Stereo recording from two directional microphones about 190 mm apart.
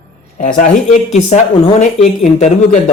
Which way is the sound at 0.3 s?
40° left (ahead or behind).